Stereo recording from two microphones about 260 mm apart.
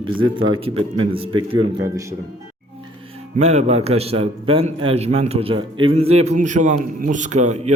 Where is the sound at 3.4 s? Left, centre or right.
Right.